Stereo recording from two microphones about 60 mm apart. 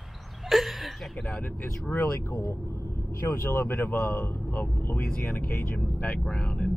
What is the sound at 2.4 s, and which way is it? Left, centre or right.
Speech, left.